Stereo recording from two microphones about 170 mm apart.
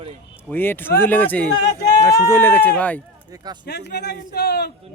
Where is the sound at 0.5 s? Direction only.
10° left (ahead or behind).